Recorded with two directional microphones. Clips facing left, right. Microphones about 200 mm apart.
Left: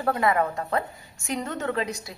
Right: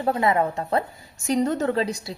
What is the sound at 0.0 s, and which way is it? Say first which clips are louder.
A woman's voice: right 2 dB; 25° right (ahead or behind).